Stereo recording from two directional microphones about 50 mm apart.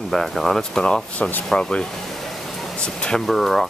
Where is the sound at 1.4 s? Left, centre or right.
Centre.